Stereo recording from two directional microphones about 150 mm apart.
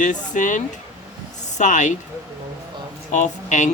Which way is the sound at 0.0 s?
55° left (ahead or behind).